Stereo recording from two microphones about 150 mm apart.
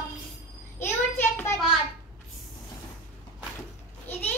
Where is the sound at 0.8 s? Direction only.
15° left (ahead or behind).